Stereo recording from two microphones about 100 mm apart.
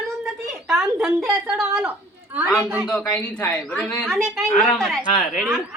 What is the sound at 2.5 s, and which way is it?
A man's voice, centre (ahead or behind).